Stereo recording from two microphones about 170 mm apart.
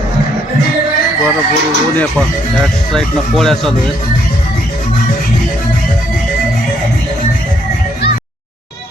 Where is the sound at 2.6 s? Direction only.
Centre (ahead or behind).